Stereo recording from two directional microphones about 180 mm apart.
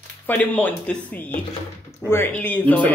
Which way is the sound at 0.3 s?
10° left (ahead or behind).